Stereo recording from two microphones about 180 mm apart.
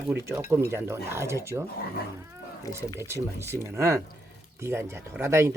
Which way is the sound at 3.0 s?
15° right (ahead or behind).